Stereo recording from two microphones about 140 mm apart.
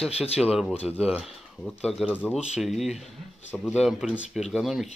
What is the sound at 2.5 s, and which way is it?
Speech, centre (ahead or behind).